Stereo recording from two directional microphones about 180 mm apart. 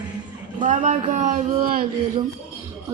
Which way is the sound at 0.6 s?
45° right (ahead or behind).